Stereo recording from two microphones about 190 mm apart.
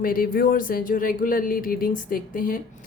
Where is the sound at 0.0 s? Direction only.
50° left (ahead or behind).